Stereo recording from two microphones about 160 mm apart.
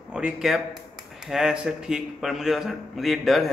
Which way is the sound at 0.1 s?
5° right (ahead or behind).